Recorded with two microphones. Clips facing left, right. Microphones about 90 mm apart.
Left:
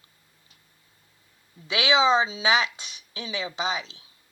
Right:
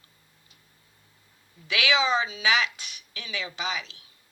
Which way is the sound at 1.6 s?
25° left (ahead or behind).